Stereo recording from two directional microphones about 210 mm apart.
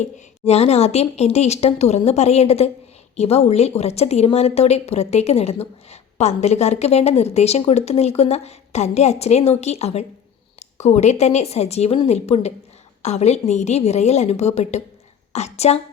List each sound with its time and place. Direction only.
0.0 s a woman's voice: 30° left (ahead or behind)